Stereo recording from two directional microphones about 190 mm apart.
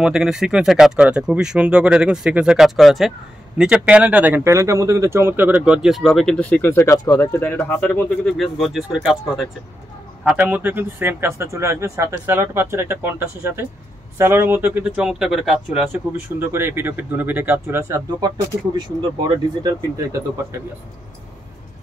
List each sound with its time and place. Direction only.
0.0 s speech: 5° right (ahead or behind); by 20.2 s 20° right (ahead or behind)